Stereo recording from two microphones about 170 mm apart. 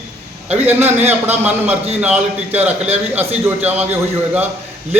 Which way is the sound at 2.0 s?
10° right (ahead or behind).